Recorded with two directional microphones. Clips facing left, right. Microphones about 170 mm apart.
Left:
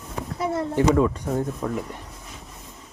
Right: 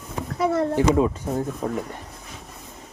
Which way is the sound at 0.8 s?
20° right (ahead or behind).